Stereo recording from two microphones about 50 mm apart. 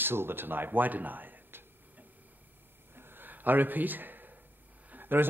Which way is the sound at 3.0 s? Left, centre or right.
Right.